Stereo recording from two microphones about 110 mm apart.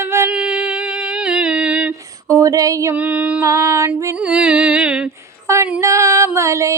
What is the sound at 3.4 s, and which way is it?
Music, 30° right (ahead or behind).